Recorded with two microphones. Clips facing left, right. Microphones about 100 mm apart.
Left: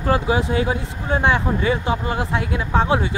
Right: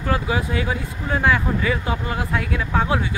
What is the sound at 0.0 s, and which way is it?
Speech, 30° left (ahead or behind).